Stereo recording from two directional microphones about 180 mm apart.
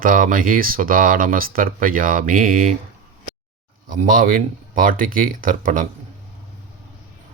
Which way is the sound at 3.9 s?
50° right (ahead or behind).